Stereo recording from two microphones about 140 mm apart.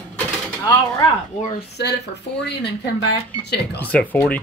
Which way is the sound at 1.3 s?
60° left (ahead or behind).